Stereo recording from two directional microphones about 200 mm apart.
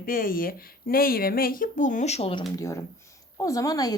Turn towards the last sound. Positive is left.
turn(degrees=15)  # may be behind; listen again after turning